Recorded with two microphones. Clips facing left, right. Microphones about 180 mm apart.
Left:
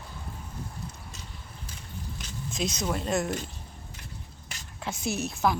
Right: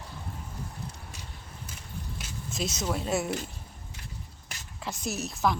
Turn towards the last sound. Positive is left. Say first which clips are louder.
# left 2 dB
turn(degrees=0)  # may be behind; listen again after turning